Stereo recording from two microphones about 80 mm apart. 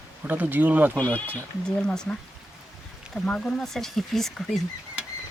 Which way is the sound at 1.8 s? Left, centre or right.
Centre.